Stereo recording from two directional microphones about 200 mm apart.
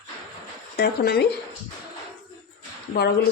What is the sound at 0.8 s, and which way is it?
Speech, 55° left (ahead or behind).